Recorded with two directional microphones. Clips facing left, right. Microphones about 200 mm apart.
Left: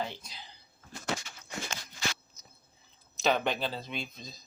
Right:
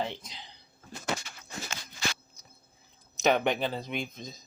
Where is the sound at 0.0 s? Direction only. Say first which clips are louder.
Right 3 dB; 20° right (ahead or behind).